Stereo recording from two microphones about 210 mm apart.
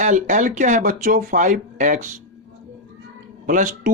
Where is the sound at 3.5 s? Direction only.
40° right (ahead or behind).